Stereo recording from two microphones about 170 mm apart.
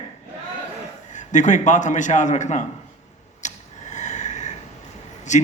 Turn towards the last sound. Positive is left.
turn(degrees=45)  # may be behind; listen again after turning